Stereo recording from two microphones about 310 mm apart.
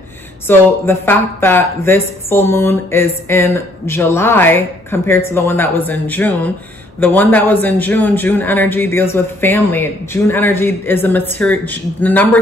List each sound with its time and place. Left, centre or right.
0.5 s a woman's voice: centre